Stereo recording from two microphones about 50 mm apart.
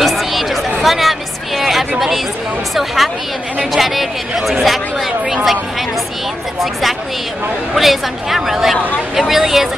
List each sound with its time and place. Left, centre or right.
0.0 s chatter: centre
1.6 s a sound: centre
2.7 s speech: centre
6.6 s speech: centre